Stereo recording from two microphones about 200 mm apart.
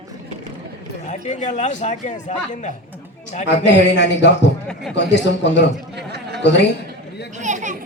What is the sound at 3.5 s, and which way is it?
A man's voice, 60° left (ahead or behind).